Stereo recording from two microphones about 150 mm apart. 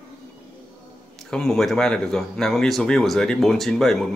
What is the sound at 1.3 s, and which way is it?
Speech, 5° left (ahead or behind).